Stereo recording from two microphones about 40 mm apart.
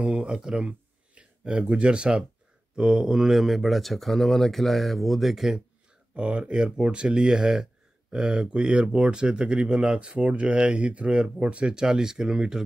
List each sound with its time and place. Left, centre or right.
0.0 s speech: right
3.3 s speech: centre
6.1 s speech: right